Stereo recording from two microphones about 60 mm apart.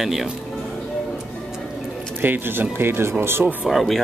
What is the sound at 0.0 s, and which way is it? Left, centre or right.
Speech, centre.